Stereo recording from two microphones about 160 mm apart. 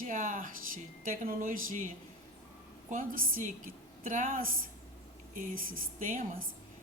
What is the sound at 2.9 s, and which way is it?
Speech, 55° right (ahead or behind).